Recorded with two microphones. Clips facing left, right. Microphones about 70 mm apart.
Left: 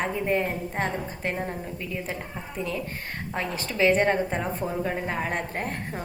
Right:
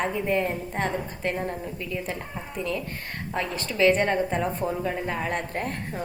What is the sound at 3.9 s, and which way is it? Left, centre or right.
A woman's voice, left.